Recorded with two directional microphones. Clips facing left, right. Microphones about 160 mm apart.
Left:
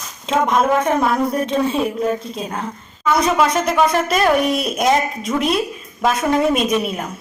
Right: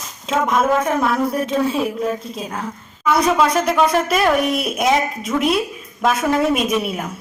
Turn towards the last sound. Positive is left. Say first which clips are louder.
# left 1 dB
turn(degrees=-5)  # may be behind; listen again after turning